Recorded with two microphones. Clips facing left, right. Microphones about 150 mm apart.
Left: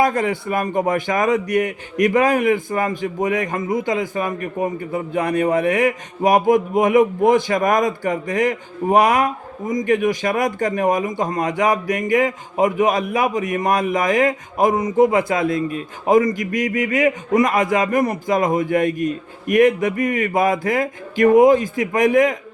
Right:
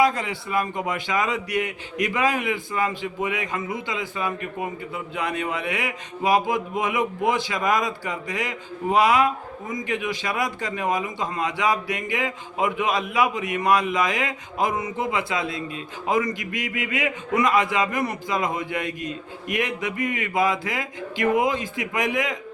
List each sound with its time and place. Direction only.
0.0 s speech: 50° left (ahead or behind)
18.9 s a man's voice: 20° right (ahead or behind)
19.5 s speech: 50° left (ahead or behind)